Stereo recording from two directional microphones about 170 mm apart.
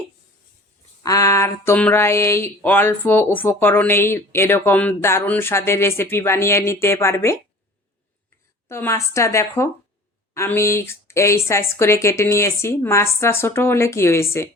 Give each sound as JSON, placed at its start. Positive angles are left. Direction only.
{"t": 1.0, "sound": "speech", "side_deg": 20}
{"t": 8.7, "sound": "speech", "side_deg": 15}